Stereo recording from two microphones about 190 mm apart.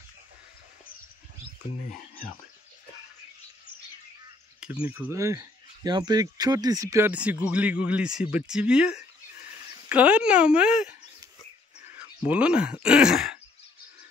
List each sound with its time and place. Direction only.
1.9 s speech: 50° left (ahead or behind)
4.7 s speech: 10° right (ahead or behind)